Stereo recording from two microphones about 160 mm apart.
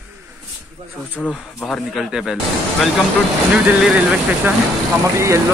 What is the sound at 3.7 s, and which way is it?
Speech, 10° right (ahead or behind).